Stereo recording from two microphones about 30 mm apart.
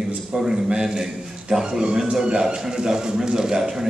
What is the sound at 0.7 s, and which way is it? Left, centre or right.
A man's voice, right.